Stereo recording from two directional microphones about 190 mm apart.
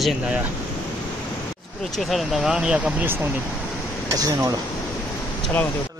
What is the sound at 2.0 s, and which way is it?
Speech, centre (ahead or behind).